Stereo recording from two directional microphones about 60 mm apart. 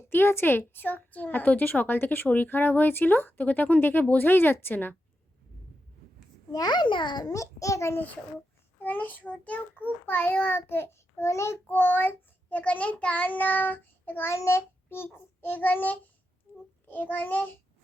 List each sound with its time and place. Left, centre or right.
0.1 s child singing: left
7.3 s a child's voice: left
7.9 s a child's voice: left
8.8 s child singing: left
11.2 s a child's voice: left
11.6 s child singing: left
14.3 s a child's voice: left
14.8 s child singing: left
16.5 s a sound: left
16.9 s a child's voice: left